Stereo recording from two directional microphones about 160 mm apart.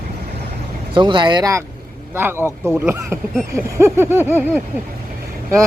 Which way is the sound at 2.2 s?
15° right (ahead or behind).